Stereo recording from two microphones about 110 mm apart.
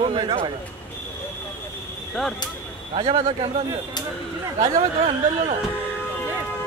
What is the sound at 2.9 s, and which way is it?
Speech, 60° right (ahead or behind).